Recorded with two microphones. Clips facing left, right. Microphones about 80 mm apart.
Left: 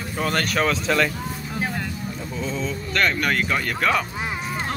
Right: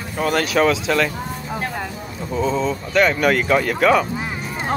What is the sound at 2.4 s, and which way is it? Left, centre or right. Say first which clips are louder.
Speech: right 8 dB; centre.